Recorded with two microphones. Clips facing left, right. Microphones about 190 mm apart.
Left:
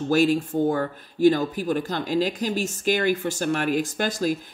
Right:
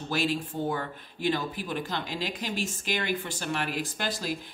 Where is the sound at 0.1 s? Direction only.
45° left (ahead or behind).